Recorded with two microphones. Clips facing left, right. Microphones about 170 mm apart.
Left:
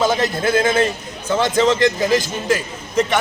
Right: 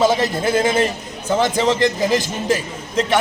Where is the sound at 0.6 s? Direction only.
20° right (ahead or behind).